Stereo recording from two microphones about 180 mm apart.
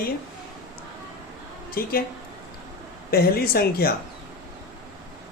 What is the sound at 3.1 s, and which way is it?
Speech, 60° left (ahead or behind).